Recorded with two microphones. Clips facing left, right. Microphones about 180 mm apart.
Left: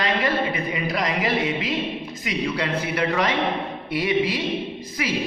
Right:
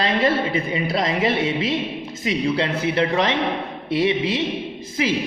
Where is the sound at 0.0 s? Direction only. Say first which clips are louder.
Right 3 dB; 25° right (ahead or behind).